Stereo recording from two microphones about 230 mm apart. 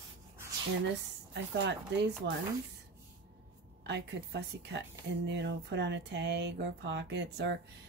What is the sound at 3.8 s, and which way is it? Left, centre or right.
Speech, right.